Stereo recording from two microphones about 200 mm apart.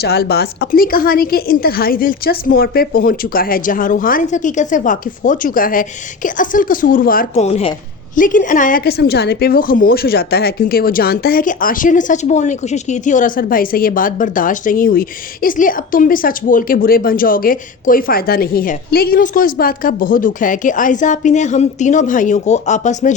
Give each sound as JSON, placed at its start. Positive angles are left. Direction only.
{"t": 0.0, "sound": "a woman's voice", "side_deg": 50}